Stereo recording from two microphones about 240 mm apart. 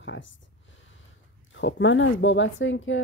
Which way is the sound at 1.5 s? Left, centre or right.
Left.